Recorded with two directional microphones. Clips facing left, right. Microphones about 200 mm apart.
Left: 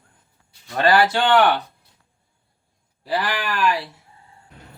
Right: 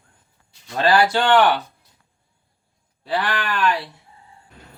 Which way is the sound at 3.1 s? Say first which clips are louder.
Right 1 dB; centre (ahead or behind).